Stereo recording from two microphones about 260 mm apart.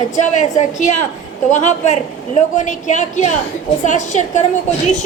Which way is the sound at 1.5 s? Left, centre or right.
Left.